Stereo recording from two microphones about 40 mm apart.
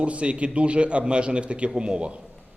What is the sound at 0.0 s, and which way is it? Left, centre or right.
A man's voice, right.